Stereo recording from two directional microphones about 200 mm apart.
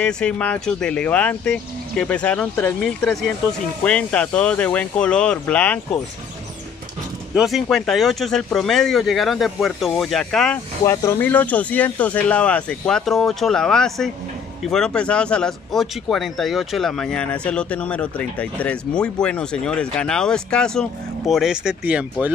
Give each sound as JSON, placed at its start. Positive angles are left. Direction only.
{"t": 0.0, "sound": "speech", "side_deg": 5}
{"t": 7.3, "sound": "speech", "side_deg": 0}
{"t": 10.9, "sound": "speech", "side_deg": 10}